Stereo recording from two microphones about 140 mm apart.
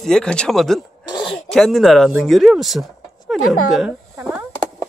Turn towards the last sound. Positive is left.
turn(degrees=-10)  # may be behind; listen again after turning